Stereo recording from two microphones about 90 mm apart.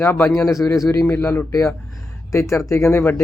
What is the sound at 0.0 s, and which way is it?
Speech, 25° left (ahead or behind).